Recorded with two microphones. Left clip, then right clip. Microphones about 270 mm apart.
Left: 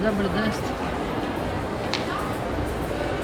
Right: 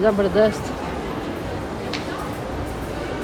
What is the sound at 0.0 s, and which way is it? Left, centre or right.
Speech, centre.